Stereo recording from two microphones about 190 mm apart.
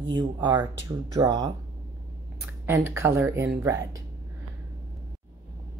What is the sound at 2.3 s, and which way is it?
Speech, 10° right (ahead or behind).